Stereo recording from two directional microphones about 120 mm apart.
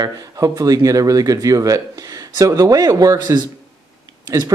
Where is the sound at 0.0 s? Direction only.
30° right (ahead or behind).